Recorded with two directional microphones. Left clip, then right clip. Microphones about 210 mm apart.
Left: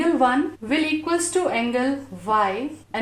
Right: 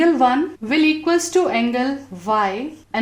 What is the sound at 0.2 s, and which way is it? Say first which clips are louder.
A woman's voice: right 3 dB; 45° right (ahead or behind).